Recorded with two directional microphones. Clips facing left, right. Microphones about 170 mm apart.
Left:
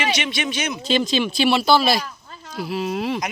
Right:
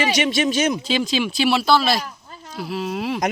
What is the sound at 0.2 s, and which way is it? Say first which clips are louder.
Speech: right 6 dB; 40° right (ahead or behind).